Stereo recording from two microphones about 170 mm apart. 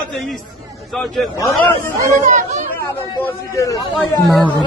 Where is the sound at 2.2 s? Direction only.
45° right (ahead or behind).